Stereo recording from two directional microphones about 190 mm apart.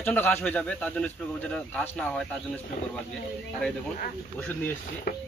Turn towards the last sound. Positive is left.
turn(degrees=55)  # may be behind; listen again after turning